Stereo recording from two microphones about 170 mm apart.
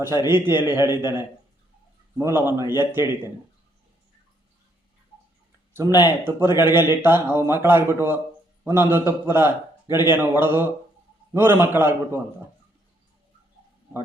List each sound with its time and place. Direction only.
0.3 s speech: 15° right (ahead or behind)
6.1 s speech: 15° right (ahead or behind)